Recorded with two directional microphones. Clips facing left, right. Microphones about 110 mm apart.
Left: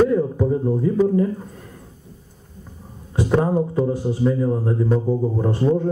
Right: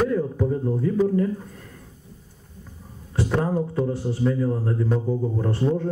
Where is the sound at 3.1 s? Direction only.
20° left (ahead or behind).